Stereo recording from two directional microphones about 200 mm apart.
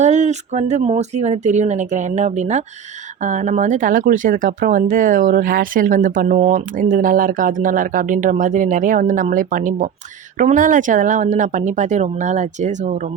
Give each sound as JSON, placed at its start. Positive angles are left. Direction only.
{"t": 0.0, "sound": "speech", "side_deg": -35}